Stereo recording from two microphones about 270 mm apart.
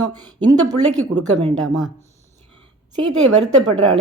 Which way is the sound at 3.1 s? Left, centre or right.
Right.